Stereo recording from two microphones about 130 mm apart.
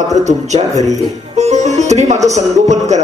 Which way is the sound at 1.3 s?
60° right (ahead or behind).